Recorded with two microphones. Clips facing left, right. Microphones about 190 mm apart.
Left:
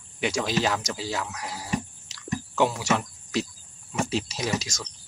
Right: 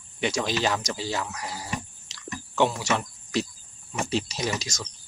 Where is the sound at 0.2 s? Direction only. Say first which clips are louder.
Even; 5° left (ahead or behind).